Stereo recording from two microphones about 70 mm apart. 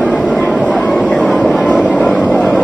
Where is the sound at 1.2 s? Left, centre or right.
Centre.